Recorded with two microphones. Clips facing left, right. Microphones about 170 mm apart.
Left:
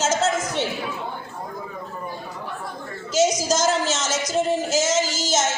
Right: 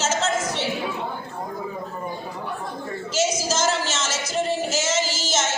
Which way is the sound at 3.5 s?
40° left (ahead or behind).